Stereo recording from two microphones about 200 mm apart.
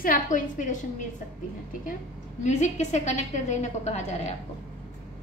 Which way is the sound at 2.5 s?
35° left (ahead or behind).